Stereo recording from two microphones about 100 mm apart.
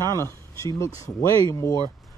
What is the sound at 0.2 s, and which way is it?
Speech, 30° left (ahead or behind).